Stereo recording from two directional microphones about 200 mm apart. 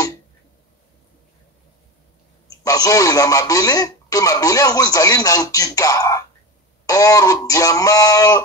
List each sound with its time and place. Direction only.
2.6 s speech: 15° left (ahead or behind)